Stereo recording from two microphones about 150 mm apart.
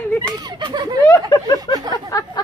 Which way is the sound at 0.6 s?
30° right (ahead or behind).